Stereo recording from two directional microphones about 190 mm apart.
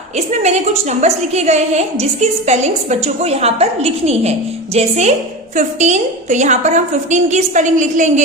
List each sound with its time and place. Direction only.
0.3 s a woman's voice: 35° right (ahead or behind)